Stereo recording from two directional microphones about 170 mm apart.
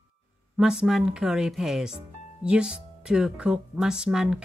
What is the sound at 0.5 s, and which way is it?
Speech, 5° right (ahead or behind).